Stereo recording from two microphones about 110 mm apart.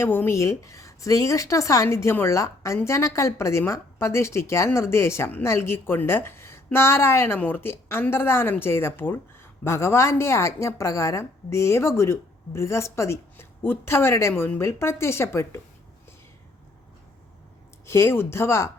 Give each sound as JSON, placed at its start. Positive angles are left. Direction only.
{"t": 0.0, "sound": "a woman's voice", "side_deg": 20}
{"t": 17.8, "sound": "a woman's voice", "side_deg": 25}